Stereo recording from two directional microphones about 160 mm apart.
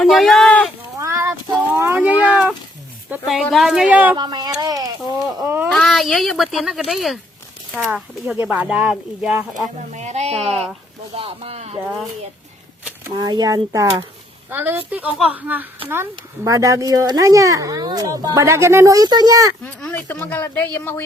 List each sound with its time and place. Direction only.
0.0 s speech: centre (ahead or behind)
0.9 s a sound: 15° right (ahead or behind)
3.2 s speech: centre (ahead or behind)
4.2 s speech: 25° right (ahead or behind)
5.6 s speech: 5° left (ahead or behind)
9.9 s speech: 45° right (ahead or behind)
10.5 s speech: centre (ahead or behind)
11.1 s speech: 35° right (ahead or behind)
13.1 s speech: 25° right (ahead or behind)
14.5 s speech: 10° right (ahead or behind)
19.6 s speech: 10° left (ahead or behind)